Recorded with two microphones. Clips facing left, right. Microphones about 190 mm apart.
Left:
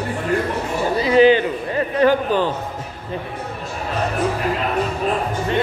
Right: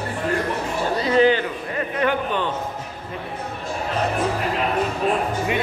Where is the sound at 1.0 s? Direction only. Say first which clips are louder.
Left 4 dB; 15° left (ahead or behind).